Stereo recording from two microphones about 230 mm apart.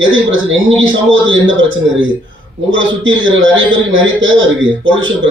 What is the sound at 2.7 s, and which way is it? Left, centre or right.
Speech, right.